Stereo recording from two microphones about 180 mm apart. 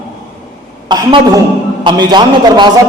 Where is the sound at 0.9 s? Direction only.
20° right (ahead or behind).